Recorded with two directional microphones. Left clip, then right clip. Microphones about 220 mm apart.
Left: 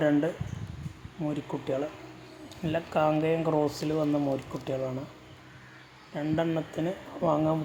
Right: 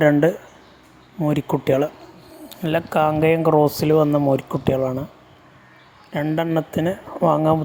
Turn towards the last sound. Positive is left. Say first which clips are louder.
# right 9 dB
turn(degrees=-35)  # may be behind; listen again after turning